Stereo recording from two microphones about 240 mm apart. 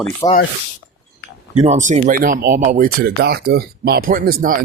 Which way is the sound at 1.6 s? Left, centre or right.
Right.